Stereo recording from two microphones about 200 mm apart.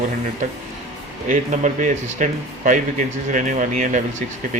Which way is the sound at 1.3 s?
35° right (ahead or behind).